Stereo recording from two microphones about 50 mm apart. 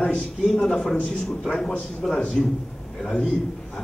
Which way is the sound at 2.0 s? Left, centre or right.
Centre.